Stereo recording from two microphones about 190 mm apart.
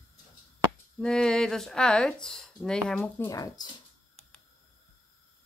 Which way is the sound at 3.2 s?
20° left (ahead or behind).